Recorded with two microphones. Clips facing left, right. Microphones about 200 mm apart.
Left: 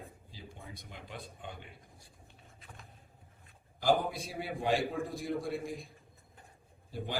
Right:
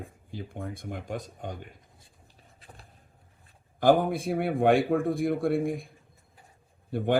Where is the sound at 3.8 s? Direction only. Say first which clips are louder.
Right 8 dB; 55° right (ahead or behind).